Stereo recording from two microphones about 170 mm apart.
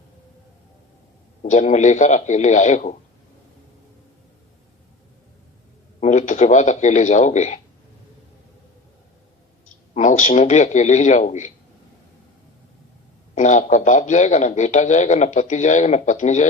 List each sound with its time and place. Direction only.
1.4 s a man's voice: 45° left (ahead or behind)
6.0 s a man's voice: 45° left (ahead or behind)
9.9 s a man's voice: 45° left (ahead or behind)
13.3 s a man's voice: 45° left (ahead or behind)